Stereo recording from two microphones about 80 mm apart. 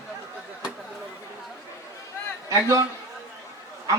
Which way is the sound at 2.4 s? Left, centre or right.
Right.